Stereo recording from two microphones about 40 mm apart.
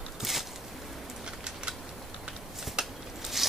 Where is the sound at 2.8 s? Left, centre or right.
Right.